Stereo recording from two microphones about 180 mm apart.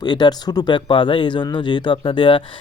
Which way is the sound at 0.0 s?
25° left (ahead or behind).